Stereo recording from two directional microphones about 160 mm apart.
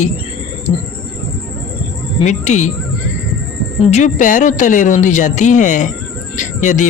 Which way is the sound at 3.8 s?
45° left (ahead or behind).